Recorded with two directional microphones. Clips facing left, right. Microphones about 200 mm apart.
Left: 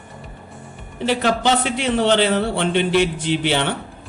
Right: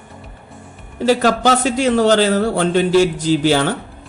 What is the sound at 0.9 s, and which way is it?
A man's voice, 40° right (ahead or behind).